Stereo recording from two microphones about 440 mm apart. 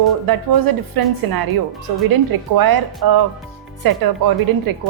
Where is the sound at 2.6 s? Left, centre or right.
Right.